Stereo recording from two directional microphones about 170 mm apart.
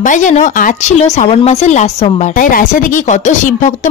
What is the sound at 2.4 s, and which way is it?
Speech, 55° left (ahead or behind).